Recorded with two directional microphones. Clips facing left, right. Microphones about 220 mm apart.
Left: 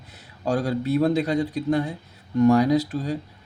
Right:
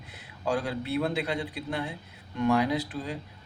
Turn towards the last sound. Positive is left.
turn(degrees=40)  # may be behind; listen again after turning